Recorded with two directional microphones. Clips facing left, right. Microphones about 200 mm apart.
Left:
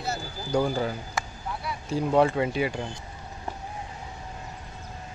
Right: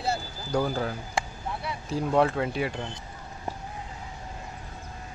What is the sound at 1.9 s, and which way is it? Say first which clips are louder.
Speech: left 2 dB; centre (ahead or behind).